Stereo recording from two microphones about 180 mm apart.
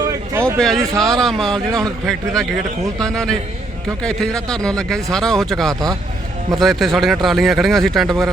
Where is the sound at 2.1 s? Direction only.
5° left (ahead or behind).